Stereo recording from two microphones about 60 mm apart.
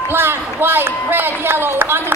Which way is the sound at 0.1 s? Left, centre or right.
Right.